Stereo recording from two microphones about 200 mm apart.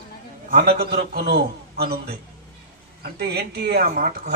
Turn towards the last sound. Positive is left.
turn(degrees=-50)  # may be behind; listen again after turning